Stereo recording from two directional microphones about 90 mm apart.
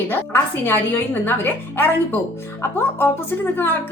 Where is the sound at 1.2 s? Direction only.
25° left (ahead or behind).